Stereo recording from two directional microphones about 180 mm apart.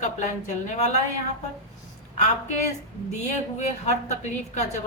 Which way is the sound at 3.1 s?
40° left (ahead or behind).